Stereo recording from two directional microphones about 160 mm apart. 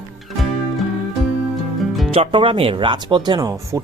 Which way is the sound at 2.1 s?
35° right (ahead or behind).